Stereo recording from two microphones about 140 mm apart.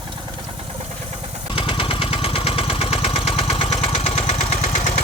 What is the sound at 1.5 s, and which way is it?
Engine, 40° left (ahead or behind).